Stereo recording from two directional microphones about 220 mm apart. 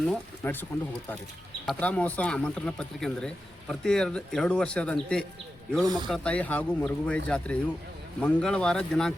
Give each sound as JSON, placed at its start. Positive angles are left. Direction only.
{"t": 0.4, "sound": "speech", "side_deg": 5}
{"t": 1.6, "sound": "speech", "side_deg": 5}
{"t": 5.8, "sound": "speech", "side_deg": -20}
{"t": 6.1, "sound": "speech", "side_deg": 5}